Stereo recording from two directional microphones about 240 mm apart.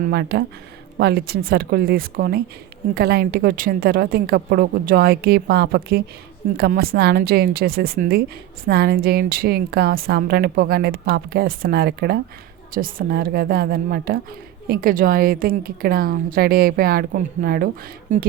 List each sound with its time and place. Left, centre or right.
0.0 s a woman's voice: right